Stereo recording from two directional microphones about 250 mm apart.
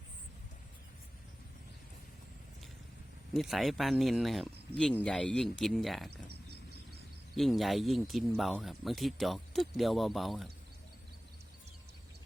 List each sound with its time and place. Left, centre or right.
3.3 s speech: centre
6.1 s a sound: right
7.3 s speech: centre